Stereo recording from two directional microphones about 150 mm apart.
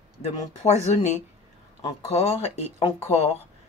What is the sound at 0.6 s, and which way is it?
Speech, 50° left (ahead or behind).